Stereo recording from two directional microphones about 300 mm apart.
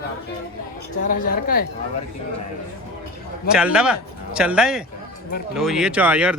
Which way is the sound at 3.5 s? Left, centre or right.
Centre.